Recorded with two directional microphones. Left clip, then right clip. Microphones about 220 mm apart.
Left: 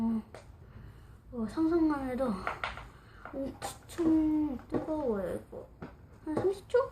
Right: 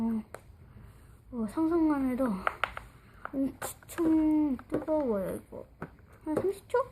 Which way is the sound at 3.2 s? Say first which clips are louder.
Right 4 dB; 35° right (ahead or behind).